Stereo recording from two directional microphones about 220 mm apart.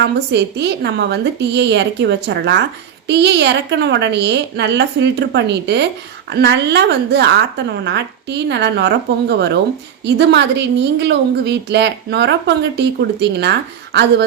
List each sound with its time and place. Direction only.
0.0 s a woman's voice: 50° right (ahead or behind)